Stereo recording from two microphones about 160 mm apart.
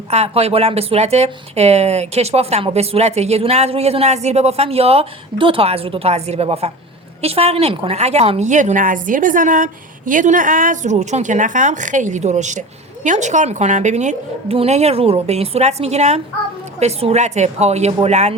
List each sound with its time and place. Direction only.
0.1 s speech: 40° right (ahead or behind)